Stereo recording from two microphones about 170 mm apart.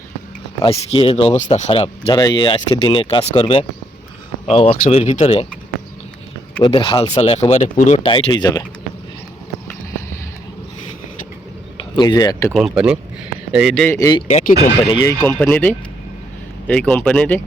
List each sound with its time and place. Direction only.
0.6 s speech: 35° left (ahead or behind)
6.6 s speech: 30° left (ahead or behind)
11.8 s speech: 25° left (ahead or behind)
12.5 s speech: centre (ahead or behind)
13.8 s speech: 15° left (ahead or behind)
14.3 s speech: 45° left (ahead or behind)
15.0 s speech: 10° left (ahead or behind)